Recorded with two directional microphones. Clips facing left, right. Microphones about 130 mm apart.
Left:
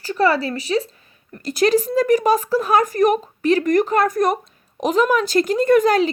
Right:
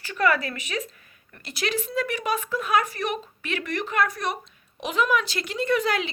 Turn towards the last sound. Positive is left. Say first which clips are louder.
# left 9 dB
turn(degrees=40)  # may be behind; listen again after turning